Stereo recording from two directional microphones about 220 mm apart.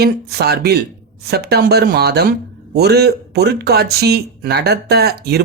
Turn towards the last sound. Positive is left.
turn(degrees=-45)  # may be behind; listen again after turning